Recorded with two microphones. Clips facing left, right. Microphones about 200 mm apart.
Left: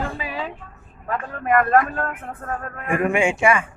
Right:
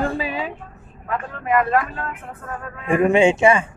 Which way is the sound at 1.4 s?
50° left (ahead or behind).